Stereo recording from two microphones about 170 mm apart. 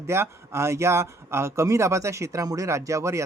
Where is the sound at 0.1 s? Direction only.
15° right (ahead or behind).